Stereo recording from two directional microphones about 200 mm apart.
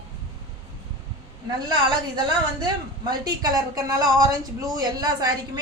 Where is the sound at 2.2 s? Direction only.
20° right (ahead or behind).